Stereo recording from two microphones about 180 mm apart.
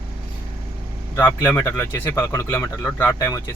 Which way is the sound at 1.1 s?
10° left (ahead or behind).